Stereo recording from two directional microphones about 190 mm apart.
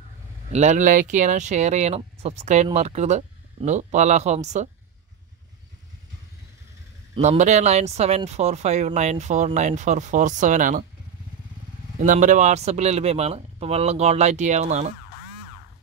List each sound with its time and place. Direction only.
0.5 s speech: 40° right (ahead or behind)
7.2 s speech: 35° right (ahead or behind)
12.0 s speech: 40° right (ahead or behind)